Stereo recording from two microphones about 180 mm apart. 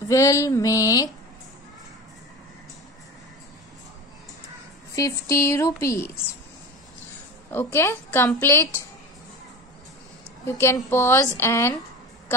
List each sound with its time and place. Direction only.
0.1 s a woman's voice: 15° left (ahead or behind)
4.9 s a woman's voice: 20° left (ahead or behind)
7.5 s a woman's voice: 15° left (ahead or behind)
10.4 s a woman's voice: 15° left (ahead or behind)